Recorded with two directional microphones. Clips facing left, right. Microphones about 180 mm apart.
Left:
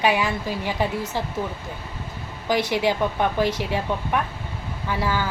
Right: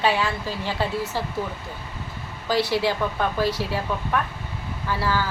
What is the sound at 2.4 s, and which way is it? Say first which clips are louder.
A woman's voice: left 1 dB; 20° left (ahead or behind).